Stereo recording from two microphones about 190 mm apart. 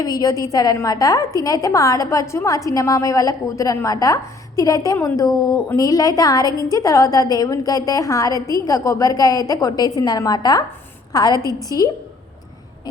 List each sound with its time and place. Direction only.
0.0 s a woman's voice: 20° left (ahead or behind)